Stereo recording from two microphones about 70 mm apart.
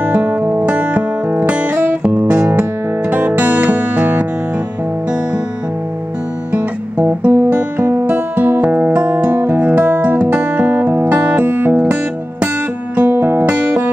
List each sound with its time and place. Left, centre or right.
0.1 s music: right
7.0 s music: right
9.3 s music: right